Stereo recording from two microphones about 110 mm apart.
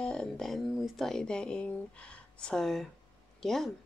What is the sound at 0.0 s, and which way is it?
Speech, 10° left (ahead or behind).